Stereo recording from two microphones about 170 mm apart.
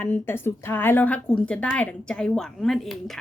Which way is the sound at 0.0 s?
15° left (ahead or behind).